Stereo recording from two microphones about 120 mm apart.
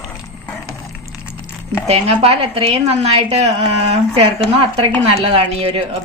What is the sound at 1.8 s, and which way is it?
A woman's voice, 55° right (ahead or behind).